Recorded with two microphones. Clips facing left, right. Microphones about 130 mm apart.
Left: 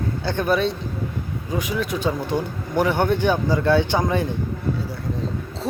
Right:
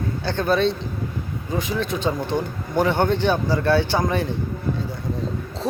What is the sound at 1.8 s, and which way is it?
A man's voice, 10° left (ahead or behind).